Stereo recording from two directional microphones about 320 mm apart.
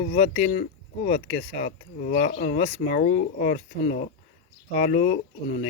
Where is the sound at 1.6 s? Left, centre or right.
Left.